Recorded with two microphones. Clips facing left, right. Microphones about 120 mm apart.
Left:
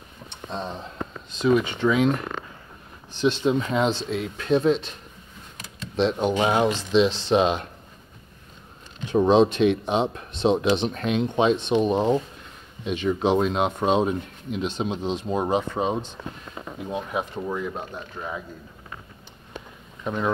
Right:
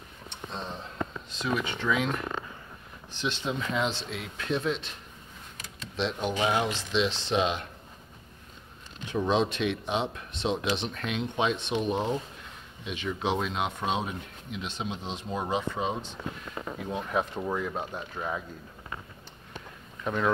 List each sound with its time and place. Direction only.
1.4 s speech: 20° left (ahead or behind)
3.2 s speech: 40° left (ahead or behind)
5.9 s speech: 40° left (ahead or behind)
9.1 s speech: 35° left (ahead or behind)
16.9 s speech: 10° left (ahead or behind)
20.0 s speech: 15° left (ahead or behind)